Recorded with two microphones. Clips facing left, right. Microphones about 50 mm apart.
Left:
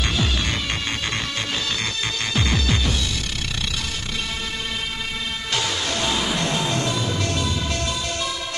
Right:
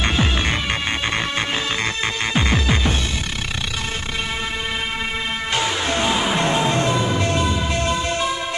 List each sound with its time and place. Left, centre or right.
0.0 s throbbing: right
2.3 s throbbing: right
5.5 s music: right